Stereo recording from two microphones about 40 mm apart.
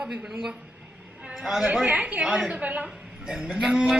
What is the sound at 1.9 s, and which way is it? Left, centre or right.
Speech, right.